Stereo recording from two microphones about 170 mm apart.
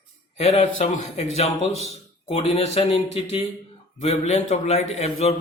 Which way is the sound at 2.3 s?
35° left (ahead or behind).